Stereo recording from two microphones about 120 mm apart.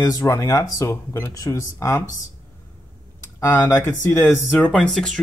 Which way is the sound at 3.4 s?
25° left (ahead or behind).